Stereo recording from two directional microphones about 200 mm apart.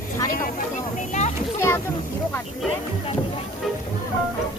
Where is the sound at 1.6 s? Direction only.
15° left (ahead or behind).